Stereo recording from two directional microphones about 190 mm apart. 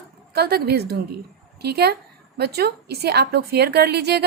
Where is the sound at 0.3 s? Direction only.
55° right (ahead or behind).